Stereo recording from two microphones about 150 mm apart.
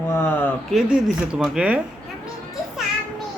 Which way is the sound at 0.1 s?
15° left (ahead or behind).